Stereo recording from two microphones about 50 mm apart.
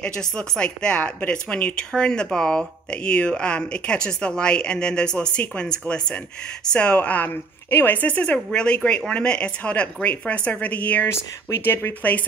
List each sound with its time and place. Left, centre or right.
0.0 s speech: centre
11.1 s speech: left